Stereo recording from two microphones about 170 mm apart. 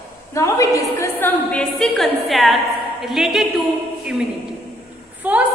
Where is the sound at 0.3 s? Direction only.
20° left (ahead or behind); by 3.4 s centre (ahead or behind).